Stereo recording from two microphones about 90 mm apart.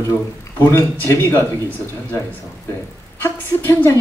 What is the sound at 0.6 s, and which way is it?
Speech, 30° left (ahead or behind).